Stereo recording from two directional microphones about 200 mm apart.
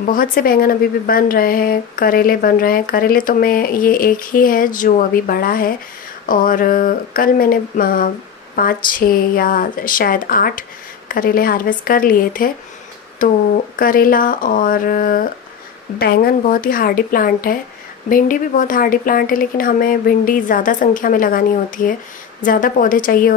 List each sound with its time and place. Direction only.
0.0 s a woman's voice: 45° left (ahead or behind)